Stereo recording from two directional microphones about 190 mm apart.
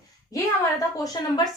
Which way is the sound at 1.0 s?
20° left (ahead or behind).